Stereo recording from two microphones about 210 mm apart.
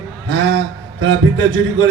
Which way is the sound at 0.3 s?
65° right (ahead or behind).